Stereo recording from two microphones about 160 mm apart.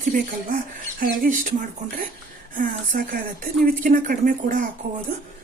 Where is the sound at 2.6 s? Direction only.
60° right (ahead or behind).